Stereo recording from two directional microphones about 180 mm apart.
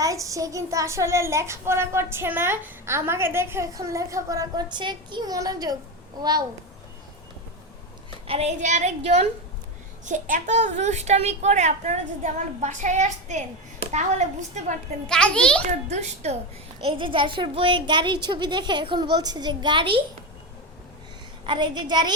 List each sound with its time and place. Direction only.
0.0 s a child's voice: 20° right (ahead or behind)
8.3 s a child's voice: 35° right (ahead or behind)
15.0 s a child's voice: 5° left (ahead or behind)
15.6 s a child's voice: 40° right (ahead or behind)
16.8 s a woman's voice: 30° right (ahead or behind)
21.4 s a woman's voice: 25° right (ahead or behind)